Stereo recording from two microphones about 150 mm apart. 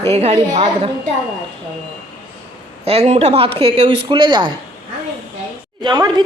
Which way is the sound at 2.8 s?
45° right (ahead or behind).